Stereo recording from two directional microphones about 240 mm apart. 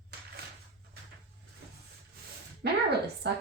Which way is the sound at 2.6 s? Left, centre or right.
Right.